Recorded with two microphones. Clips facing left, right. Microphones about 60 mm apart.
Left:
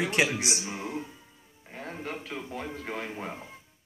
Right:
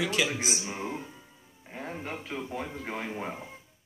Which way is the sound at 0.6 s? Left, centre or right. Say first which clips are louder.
Even; centre.